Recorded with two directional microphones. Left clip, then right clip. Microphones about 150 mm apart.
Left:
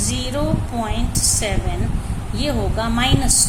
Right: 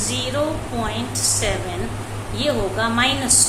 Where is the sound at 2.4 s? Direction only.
40° left (ahead or behind).